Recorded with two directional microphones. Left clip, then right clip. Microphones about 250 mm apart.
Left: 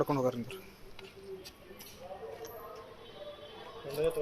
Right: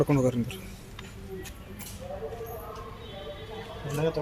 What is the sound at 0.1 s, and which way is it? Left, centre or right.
Speech, centre.